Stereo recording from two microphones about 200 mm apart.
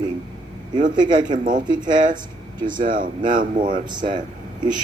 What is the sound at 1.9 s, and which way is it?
A man's voice, 40° right (ahead or behind).